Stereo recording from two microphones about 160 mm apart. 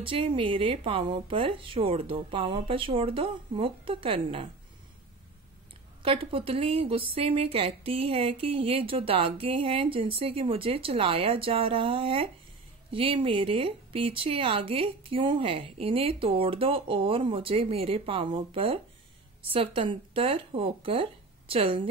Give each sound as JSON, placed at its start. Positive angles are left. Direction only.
{"t": 0.0, "sound": "a woman's voice", "side_deg": -35}
{"t": 6.0, "sound": "a woman's voice", "side_deg": -35}